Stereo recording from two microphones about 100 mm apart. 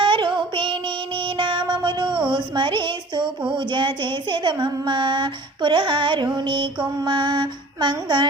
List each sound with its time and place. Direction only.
0.0 s music: 55° right (ahead or behind)